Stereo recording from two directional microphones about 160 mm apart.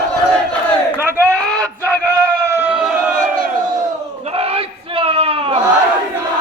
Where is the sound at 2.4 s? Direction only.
15° right (ahead or behind).